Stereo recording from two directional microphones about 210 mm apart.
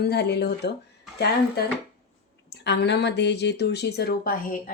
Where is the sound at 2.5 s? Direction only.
55° left (ahead or behind).